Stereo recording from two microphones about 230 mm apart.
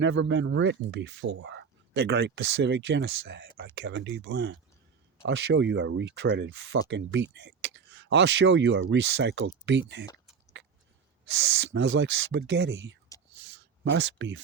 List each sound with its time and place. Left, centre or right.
0.0 s speech: right
11.3 s speech: right
13.5 s a sound: right